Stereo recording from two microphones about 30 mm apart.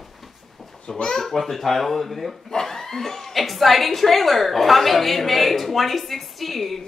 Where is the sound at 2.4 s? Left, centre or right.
Centre.